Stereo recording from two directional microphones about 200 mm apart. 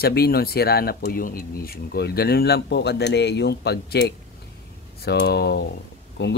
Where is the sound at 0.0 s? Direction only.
50° left (ahead or behind).